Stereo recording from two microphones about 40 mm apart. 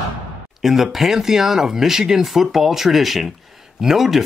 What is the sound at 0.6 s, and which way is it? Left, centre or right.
Speech, centre.